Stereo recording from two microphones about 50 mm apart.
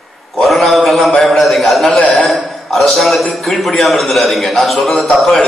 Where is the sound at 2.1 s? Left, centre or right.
Centre.